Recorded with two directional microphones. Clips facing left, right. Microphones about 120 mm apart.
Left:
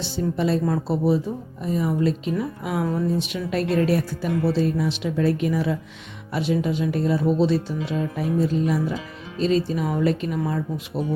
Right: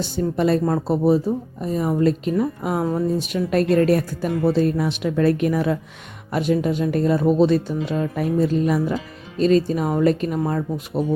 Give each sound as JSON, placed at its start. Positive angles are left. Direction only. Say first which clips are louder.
{"t": 0.0, "sound": "speech", "louder": "right 3 dB", "side_deg": -55}
{"t": 0.7, "sound": "speech", "louder": "right 3 dB", "side_deg": -45}